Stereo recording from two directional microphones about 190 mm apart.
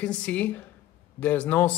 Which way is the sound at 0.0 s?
5° left (ahead or behind).